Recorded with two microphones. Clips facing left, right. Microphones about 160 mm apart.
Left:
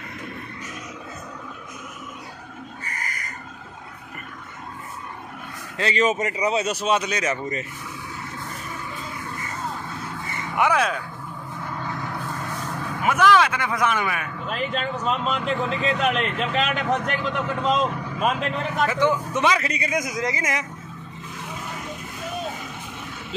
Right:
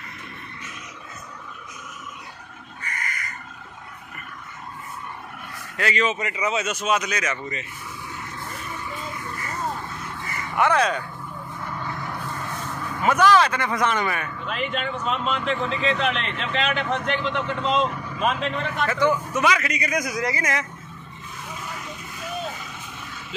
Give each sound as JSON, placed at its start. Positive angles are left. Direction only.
{"t": 2.8, "sound": "crow", "side_deg": 35}
{"t": 5.8, "sound": "speech", "side_deg": 30}
{"t": 6.0, "sound": "speech", "side_deg": 40}
{"t": 10.2, "sound": "a sound", "side_deg": 25}
{"t": 10.6, "sound": "a man's voice", "side_deg": 5}
{"t": 13.0, "sound": "a man's voice", "side_deg": 5}
{"t": 14.5, "sound": "speech", "side_deg": 40}
{"t": 18.2, "sound": "a man's voice", "side_deg": 5}
{"t": 18.9, "sound": "a man's voice", "side_deg": 20}